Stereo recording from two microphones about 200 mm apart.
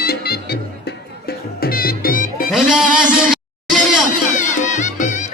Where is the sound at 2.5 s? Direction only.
Centre (ahead or behind).